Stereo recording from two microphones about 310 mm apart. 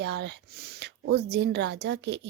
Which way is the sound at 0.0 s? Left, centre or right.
Right.